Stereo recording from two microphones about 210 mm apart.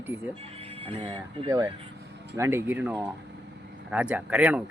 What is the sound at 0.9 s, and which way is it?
Speech, 25° right (ahead or behind).